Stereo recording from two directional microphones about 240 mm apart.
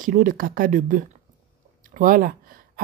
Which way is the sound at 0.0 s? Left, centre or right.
Right.